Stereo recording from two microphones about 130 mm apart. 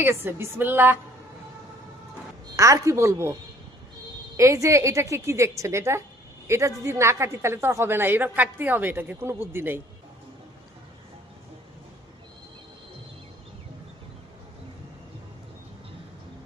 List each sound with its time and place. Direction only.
0.0 s a woman's voice: 15° right (ahead or behind)
2.6 s a woman's voice: 25° right (ahead or behind)
4.4 s a woman's voice: 25° right (ahead or behind)